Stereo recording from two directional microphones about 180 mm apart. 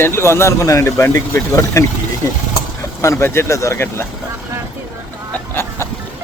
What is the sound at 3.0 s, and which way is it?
Speech, 15° left (ahead or behind).